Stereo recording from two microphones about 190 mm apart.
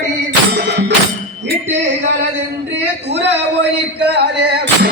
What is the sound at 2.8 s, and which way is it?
Speech, 65° right (ahead or behind).